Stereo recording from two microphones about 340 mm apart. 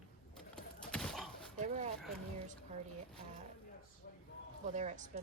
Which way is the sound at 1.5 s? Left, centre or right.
Centre.